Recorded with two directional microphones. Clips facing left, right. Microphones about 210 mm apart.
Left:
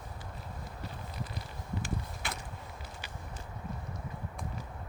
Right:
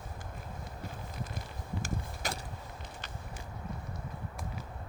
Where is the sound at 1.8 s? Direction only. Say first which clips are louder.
Right 1 dB; 40° right (ahead or behind).